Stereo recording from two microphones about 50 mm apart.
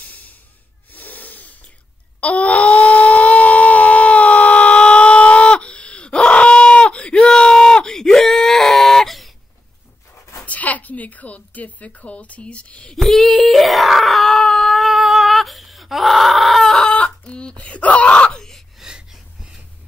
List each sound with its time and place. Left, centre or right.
0.0 s snort: left
2.1 s shofar: left; by 9.3 s centre
10.4 s a woman's voice: left
12.9 s screaming: centre
16.6 s chicken: centre
17.3 s wail: left
18.8 s wheeze: centre